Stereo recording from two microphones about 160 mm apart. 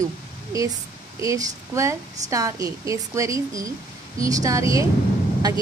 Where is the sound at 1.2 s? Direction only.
20° right (ahead or behind).